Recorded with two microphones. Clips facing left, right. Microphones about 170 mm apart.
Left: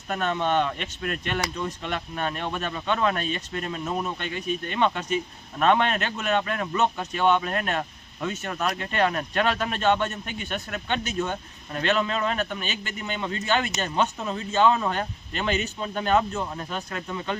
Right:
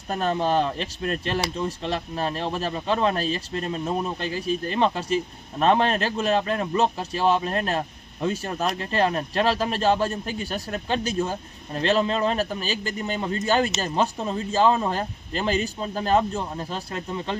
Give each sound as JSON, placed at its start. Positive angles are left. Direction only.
{"t": 0.1, "sound": "speech", "side_deg": -35}